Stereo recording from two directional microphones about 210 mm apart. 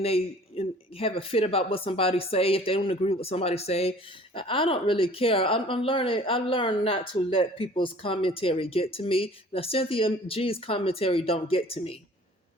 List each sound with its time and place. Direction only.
0.0 s a woman's voice: 30° left (ahead or behind)